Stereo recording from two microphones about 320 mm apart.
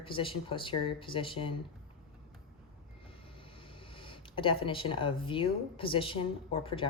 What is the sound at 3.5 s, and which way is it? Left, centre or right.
Speech, centre.